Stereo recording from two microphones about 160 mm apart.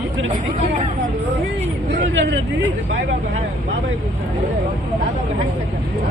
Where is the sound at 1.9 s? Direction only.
90° right.